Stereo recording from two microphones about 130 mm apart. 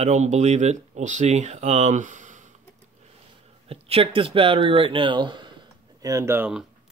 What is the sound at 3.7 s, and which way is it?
Speech, 50° right (ahead or behind).